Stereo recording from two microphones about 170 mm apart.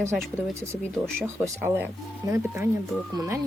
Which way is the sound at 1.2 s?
15° right (ahead or behind).